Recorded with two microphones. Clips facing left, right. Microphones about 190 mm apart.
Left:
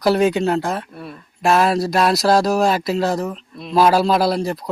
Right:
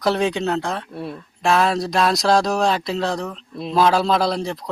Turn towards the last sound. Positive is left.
turn(degrees=5)  # may be behind; listen again after turning